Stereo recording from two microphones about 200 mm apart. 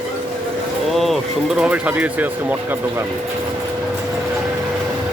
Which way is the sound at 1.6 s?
5° right (ahead or behind).